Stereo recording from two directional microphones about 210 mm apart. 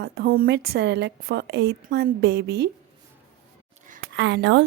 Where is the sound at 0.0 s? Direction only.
50° right (ahead or behind).